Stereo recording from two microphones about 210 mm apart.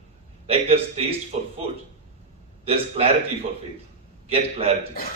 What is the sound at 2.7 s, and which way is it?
Speech, 30° right (ahead or behind).